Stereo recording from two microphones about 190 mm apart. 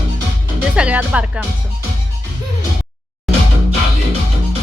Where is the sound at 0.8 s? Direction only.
5° right (ahead or behind).